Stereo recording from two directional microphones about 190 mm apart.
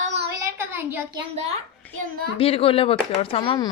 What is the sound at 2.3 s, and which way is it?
Speech, 30° left (ahead or behind).